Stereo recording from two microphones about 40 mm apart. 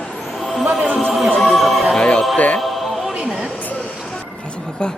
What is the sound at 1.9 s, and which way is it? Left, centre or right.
Music, left.